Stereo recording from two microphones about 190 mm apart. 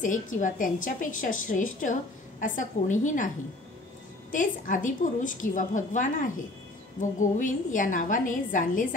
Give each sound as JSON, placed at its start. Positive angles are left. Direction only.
{"t": 0.0, "sound": "a woman's voice", "side_deg": 45}
{"t": 4.3, "sound": "a woman's voice", "side_deg": 45}